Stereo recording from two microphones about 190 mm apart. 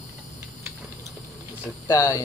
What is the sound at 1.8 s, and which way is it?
Speech, 15° left (ahead or behind).